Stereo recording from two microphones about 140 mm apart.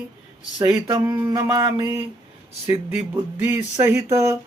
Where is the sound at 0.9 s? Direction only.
20° right (ahead or behind).